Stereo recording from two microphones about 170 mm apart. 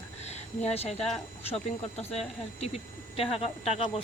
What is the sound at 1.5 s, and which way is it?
Speech, 40° left (ahead or behind).